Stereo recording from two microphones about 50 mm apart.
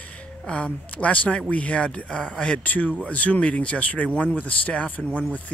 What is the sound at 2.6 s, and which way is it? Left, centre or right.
Speech, left.